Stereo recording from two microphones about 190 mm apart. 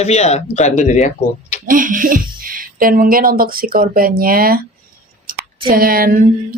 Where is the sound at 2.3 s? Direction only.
50° right (ahead or behind).